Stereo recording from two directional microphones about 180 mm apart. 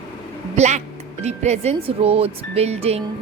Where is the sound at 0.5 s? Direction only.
40° right (ahead or behind).